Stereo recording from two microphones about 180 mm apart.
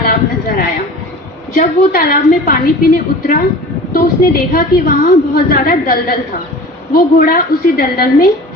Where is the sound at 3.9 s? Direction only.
55° left (ahead or behind).